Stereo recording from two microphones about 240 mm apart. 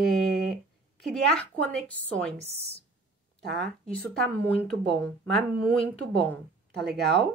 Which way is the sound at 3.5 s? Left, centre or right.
Centre.